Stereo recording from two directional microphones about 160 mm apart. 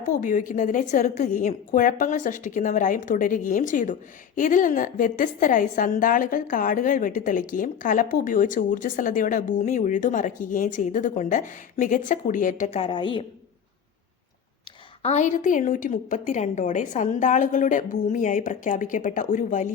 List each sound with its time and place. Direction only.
0.0 s a woman's voice: 55° left (ahead or behind)
12.8 s a woman's voice: 30° left (ahead or behind)
15.0 s a woman's voice: 45° left (ahead or behind)